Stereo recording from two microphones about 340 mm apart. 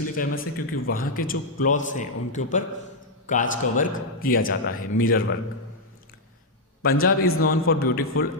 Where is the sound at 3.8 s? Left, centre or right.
Left.